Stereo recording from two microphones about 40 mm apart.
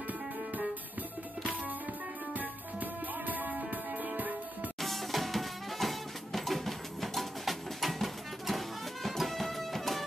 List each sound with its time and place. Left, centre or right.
2.3 s music: right
4.7 s music: centre